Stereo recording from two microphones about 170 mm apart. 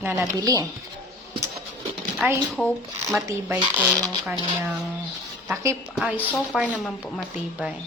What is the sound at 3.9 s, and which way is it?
Speech, centre (ahead or behind).